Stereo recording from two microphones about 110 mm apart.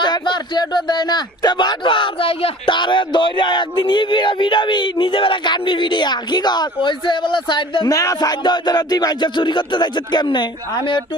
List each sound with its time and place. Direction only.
0.0 s speech: 40° left (ahead or behind)
7.9 s music: 30° left (ahead or behind)